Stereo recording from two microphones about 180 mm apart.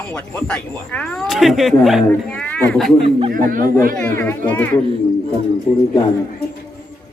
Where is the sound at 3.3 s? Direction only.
50° right (ahead or behind).